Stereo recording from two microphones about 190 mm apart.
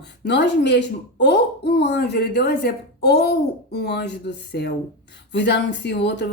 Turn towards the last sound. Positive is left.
turn(degrees=65)  # may be behind; listen again after turning